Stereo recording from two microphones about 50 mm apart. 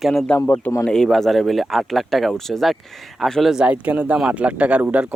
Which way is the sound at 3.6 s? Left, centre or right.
Right.